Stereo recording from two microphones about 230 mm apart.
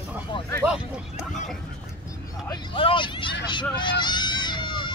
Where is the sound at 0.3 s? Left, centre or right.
Centre.